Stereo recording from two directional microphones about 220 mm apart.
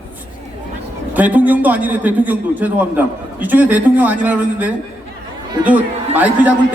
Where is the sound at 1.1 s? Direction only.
5° right (ahead or behind).